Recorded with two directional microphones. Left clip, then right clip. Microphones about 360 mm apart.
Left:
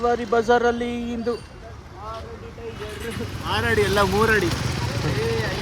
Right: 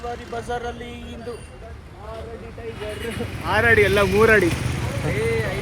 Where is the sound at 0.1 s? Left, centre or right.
Left.